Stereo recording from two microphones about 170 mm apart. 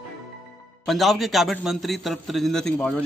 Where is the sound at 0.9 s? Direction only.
Centre (ahead or behind).